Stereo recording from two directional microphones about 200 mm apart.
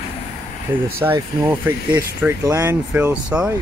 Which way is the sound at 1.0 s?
15° right (ahead or behind).